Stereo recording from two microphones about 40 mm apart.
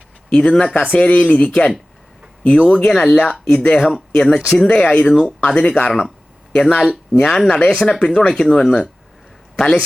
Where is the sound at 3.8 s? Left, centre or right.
Centre.